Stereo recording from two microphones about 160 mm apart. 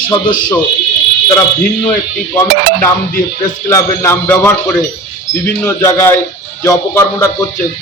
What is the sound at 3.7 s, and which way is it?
A man's voice, 15° left (ahead or behind).